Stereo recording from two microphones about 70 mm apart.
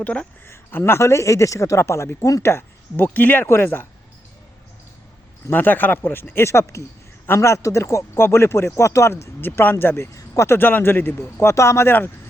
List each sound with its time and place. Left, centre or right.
0.0 s speech: centre
0.4 s speech: left
1.8 s speech: left
2.4 s speech: left
5.5 s speech: left
10.2 s a sound: left
10.5 s speech: left